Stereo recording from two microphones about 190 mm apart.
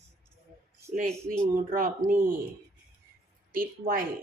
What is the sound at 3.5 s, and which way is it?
Speech, 50° right (ahead or behind).